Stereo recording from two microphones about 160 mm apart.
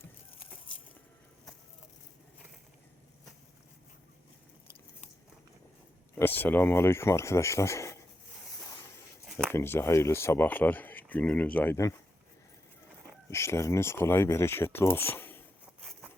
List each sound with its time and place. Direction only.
6.1 s speech: 15° left (ahead or behind)
9.4 s speech: 15° left (ahead or behind)
13.3 s speech: 15° left (ahead or behind)